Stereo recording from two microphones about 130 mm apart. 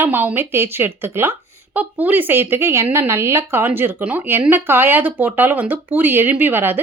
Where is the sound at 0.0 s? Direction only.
15° right (ahead or behind).